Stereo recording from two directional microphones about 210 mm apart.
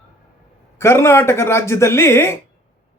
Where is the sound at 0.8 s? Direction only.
10° left (ahead or behind).